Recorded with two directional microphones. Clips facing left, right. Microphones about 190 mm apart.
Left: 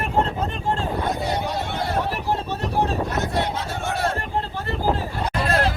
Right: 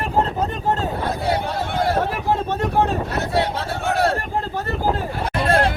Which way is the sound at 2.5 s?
50° right (ahead or behind).